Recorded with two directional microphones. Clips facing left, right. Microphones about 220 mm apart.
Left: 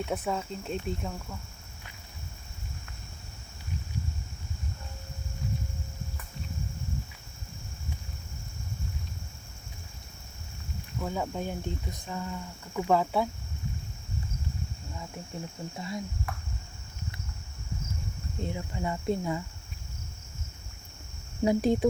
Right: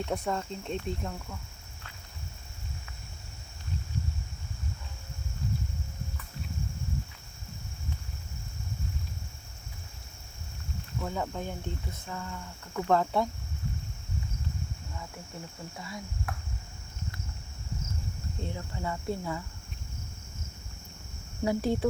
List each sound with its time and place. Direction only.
0.0 s speech: 5° left (ahead or behind)
11.0 s speech: 10° left (ahead or behind)
16.3 s cricket: centre (ahead or behind)
18.3 s speech: 15° left (ahead or behind)
21.4 s speech: 20° left (ahead or behind)